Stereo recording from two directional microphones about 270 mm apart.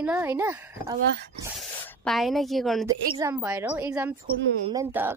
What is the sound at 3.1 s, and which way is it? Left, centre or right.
Speech, centre.